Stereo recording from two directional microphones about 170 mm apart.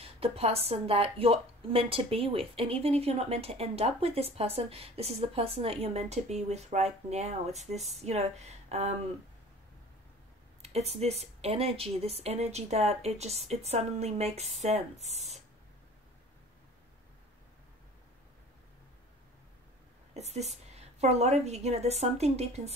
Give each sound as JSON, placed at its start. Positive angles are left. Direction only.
{"t": 0.0, "sound": "a woman's voice", "side_deg": -35}
{"t": 10.6, "sound": "a woman's voice", "side_deg": -40}
{"t": 20.2, "sound": "a woman's voice", "side_deg": -40}